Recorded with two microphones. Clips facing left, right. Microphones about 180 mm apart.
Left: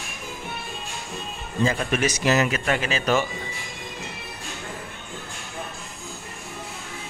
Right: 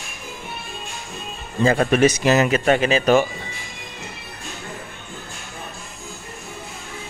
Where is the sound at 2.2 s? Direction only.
25° right (ahead or behind).